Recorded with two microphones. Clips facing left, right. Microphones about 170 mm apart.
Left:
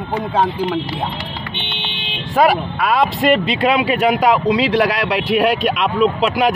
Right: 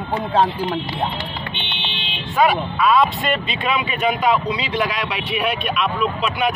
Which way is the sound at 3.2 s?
80° left.